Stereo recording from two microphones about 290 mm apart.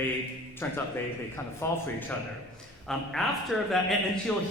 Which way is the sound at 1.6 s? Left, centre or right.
Centre.